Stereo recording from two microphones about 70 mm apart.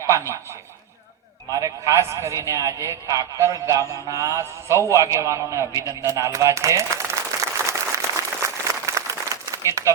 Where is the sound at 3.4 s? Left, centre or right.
Right.